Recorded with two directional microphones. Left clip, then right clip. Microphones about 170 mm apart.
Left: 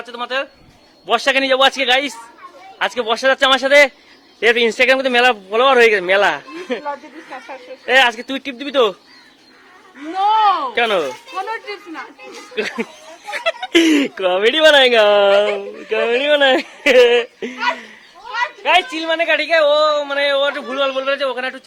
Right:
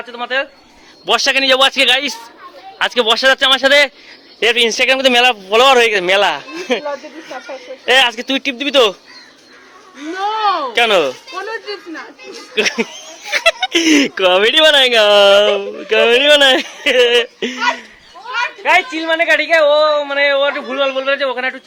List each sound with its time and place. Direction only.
0.0 s a man's voice: 10° left (ahead or behind)
1.0 s speech: 15° right (ahead or behind)
7.9 s speech: 10° right (ahead or behind)
10.2 s speech: 5° left (ahead or behind)
18.6 s a man's voice: 5° left (ahead or behind)